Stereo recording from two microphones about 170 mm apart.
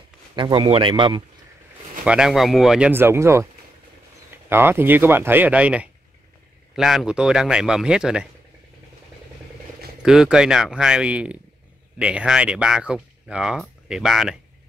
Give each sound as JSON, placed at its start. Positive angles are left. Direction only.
{"t": 0.4, "sound": "speech", "side_deg": -30}
{"t": 2.0, "sound": "speech", "side_deg": -5}
{"t": 2.9, "sound": "speech", "side_deg": -15}
{"t": 10.0, "sound": "speech", "side_deg": -5}